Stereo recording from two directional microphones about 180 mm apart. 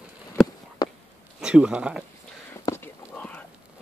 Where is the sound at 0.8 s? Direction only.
20° left (ahead or behind).